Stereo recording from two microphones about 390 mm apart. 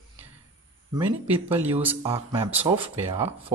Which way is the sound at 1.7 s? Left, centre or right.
Centre.